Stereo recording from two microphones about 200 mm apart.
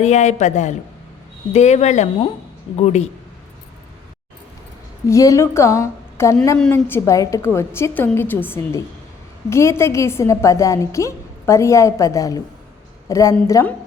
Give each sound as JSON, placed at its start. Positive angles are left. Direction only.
{"t": 0.0, "sound": "a man's voice", "side_deg": 35}
{"t": 5.0, "sound": "a woman's voice", "side_deg": 15}